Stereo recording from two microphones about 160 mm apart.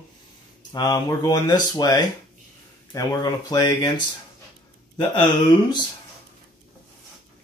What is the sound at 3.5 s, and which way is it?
Speech, 20° left (ahead or behind).